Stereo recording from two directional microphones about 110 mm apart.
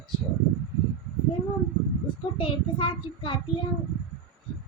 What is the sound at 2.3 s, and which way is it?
Child singing, 50° left (ahead or behind).